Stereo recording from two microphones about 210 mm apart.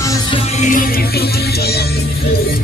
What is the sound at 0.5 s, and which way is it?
Music, 40° left (ahead or behind).